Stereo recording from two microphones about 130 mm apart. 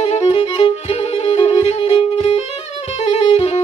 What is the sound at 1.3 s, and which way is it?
Music, 55° left (ahead or behind).